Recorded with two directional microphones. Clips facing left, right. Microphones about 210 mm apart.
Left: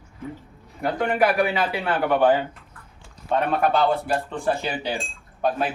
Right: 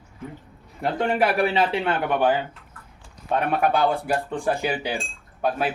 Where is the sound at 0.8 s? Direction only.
30° right (ahead or behind).